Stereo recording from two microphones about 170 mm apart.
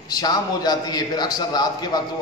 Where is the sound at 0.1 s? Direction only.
25° left (ahead or behind).